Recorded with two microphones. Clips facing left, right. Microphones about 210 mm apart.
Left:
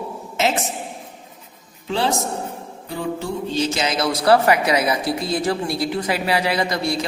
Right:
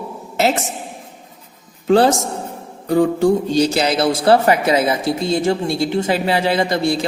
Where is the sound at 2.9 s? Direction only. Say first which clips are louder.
Right 12 dB; 45° right (ahead or behind).